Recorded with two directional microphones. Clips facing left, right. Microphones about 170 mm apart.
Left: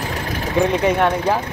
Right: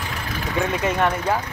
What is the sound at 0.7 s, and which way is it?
Speech, 15° left (ahead or behind).